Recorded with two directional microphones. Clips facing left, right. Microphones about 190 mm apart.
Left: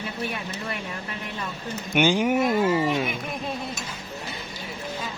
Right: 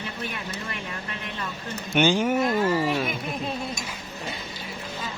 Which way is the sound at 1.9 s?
10° left (ahead or behind).